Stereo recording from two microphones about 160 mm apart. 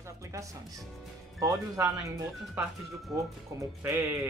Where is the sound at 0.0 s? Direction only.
20° right (ahead or behind).